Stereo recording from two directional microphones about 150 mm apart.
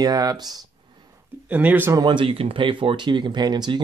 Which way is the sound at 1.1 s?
10° right (ahead or behind).